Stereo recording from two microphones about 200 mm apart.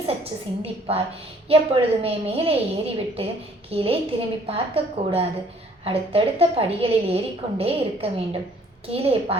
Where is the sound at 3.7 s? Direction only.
30° right (ahead or behind).